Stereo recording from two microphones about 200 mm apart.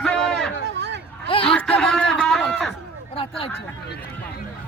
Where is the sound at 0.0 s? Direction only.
5° left (ahead or behind).